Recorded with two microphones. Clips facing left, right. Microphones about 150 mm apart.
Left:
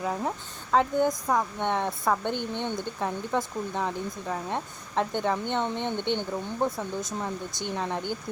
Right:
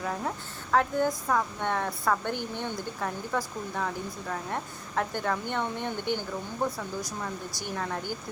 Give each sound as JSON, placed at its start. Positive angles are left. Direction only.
{"t": 0.0, "sound": "speech", "side_deg": 15}